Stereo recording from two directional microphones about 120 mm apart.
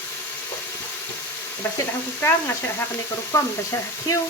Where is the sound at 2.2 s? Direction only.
20° left (ahead or behind).